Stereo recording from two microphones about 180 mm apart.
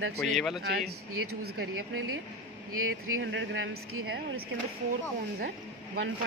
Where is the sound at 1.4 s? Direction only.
60° right (ahead or behind).